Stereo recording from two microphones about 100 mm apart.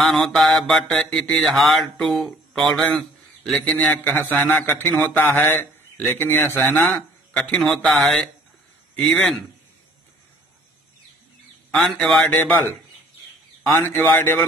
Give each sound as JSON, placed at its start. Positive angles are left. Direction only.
{"t": 0.0, "sound": "mantra", "side_deg": 5}
{"t": 2.8, "sound": "a man's voice", "side_deg": 15}
{"t": 11.7, "sound": "mantra", "side_deg": 5}
{"t": 13.7, "sound": "a man's voice", "side_deg": 25}